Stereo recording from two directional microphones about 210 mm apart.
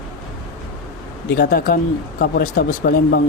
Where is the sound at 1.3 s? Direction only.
50° left (ahead or behind).